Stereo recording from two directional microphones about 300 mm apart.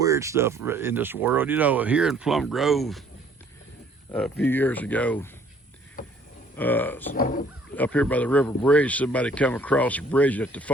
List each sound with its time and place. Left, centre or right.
0.0 s speech: centre
4.1 s speech: centre
6.6 s speech: centre
7.1 s speech: left
7.8 s speech: centre